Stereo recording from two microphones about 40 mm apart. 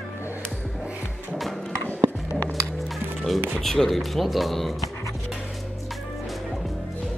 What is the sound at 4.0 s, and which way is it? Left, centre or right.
Speech, centre.